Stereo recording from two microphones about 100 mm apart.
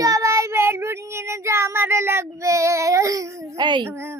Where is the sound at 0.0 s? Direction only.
35° right (ahead or behind).